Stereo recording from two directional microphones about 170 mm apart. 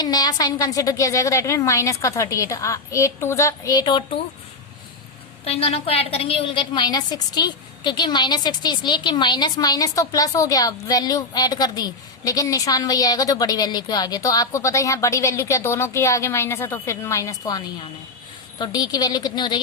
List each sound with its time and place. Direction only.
0.0 s a woman's voice: 25° left (ahead or behind)
5.5 s a woman's voice: 35° left (ahead or behind); by 17.6 s 20° left (ahead or behind)
18.6 s a woman's voice: 20° left (ahead or behind)